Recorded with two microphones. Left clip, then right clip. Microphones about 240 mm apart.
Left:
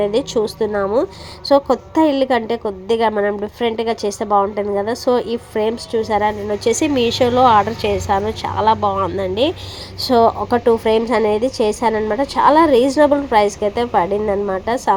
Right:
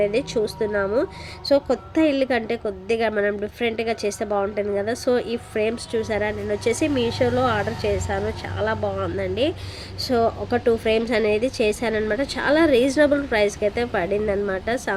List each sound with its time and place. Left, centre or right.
0.0 s a woman's voice: centre